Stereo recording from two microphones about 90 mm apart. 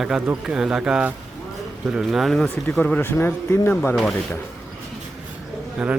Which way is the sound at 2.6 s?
20° left (ahead or behind).